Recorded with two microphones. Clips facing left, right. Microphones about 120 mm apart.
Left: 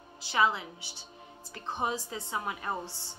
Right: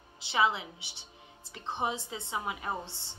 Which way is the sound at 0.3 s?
25° right (ahead or behind).